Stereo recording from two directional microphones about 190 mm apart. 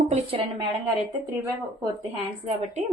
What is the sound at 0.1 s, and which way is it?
Speech, 30° right (ahead or behind).